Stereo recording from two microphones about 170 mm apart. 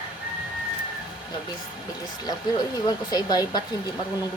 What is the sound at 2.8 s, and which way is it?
Speech, 25° left (ahead or behind).